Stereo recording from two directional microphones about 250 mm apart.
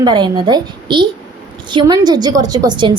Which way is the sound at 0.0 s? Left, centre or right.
Centre.